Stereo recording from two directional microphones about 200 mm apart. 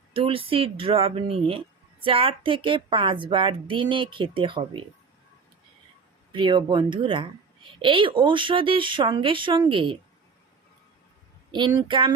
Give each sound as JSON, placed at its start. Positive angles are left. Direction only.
{"t": 0.1, "sound": "speech", "side_deg": -25}
{"t": 6.3, "sound": "speech", "side_deg": -25}
{"t": 11.8, "sound": "speech", "side_deg": -25}